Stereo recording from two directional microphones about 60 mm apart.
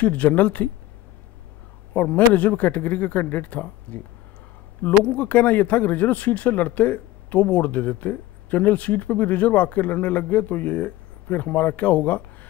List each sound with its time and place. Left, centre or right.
0.0 s speech: left
2.0 s speech: left